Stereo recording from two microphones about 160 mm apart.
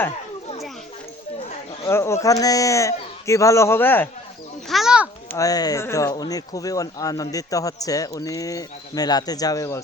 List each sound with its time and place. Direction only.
1.8 s speech: 15° left (ahead or behind)
4.7 s a sound: 5° right (ahead or behind)
5.3 s speech: 20° left (ahead or behind)